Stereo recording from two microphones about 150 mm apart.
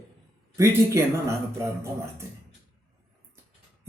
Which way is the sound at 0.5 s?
20° right (ahead or behind).